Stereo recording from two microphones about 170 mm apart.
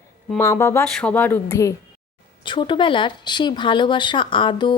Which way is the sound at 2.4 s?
30° left (ahead or behind).